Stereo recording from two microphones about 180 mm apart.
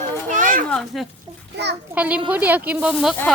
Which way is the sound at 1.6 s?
70° right (ahead or behind).